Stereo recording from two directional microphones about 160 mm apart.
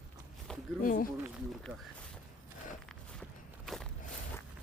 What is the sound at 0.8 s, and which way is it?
Speech, 60° left (ahead or behind).